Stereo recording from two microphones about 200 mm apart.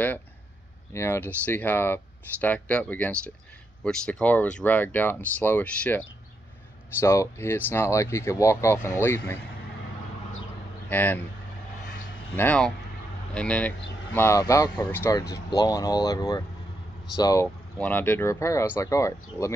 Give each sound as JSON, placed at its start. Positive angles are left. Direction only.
{"t": 0.9, "sound": "speech", "side_deg": 10}
{"t": 10.9, "sound": "speech", "side_deg": 10}
{"t": 12.4, "sound": "speech", "side_deg": 5}